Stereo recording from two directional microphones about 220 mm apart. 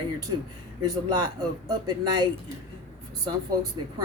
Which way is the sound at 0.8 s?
20° right (ahead or behind).